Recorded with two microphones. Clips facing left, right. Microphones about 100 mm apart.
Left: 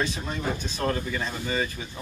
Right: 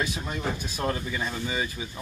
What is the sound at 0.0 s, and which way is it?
Speech, 10° right (ahead or behind).